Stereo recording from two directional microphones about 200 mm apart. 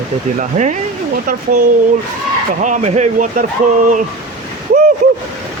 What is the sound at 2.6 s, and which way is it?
Speech, 35° right (ahead or behind).